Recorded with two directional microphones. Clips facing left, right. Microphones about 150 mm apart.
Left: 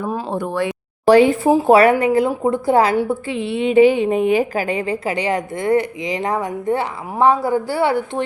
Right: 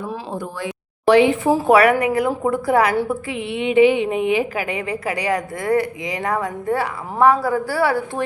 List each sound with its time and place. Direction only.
0.3 s speech: 65° left (ahead or behind)
1.0 s speech: 40° left (ahead or behind)
1.5 s a woman's voice: 20° left (ahead or behind)